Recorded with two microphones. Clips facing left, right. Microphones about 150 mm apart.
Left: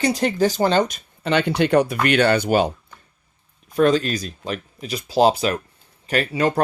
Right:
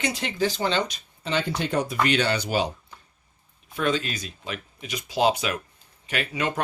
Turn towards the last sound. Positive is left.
turn(degrees=35)  # may be behind; listen again after turning